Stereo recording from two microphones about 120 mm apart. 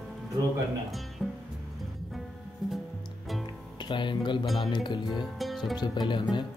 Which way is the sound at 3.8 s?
40° left (ahead or behind).